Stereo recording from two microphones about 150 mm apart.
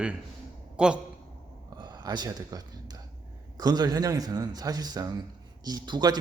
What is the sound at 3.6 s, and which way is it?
Speech, 25° right (ahead or behind).